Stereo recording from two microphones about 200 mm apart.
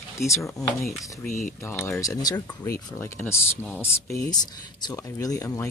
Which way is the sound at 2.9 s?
10° left (ahead or behind).